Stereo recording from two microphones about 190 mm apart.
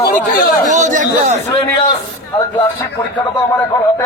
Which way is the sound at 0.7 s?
40° right (ahead or behind).